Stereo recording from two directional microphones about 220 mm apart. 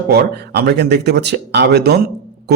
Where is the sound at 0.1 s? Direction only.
45° right (ahead or behind).